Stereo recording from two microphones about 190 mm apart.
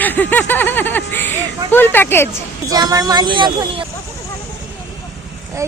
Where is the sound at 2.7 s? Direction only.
20° right (ahead or behind).